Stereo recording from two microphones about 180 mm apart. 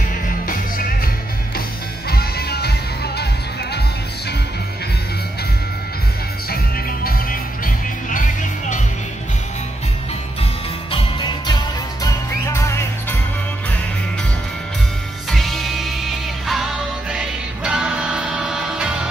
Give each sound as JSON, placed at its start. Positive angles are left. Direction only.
{"t": 2.0, "sound": "music", "side_deg": 60}
{"t": 6.5, "sound": "music", "side_deg": 55}
{"t": 10.9, "sound": "music", "side_deg": 25}
{"t": 15.3, "sound": "music", "side_deg": 0}